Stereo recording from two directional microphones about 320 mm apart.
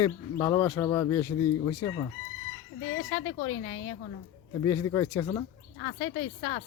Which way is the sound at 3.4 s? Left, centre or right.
Left.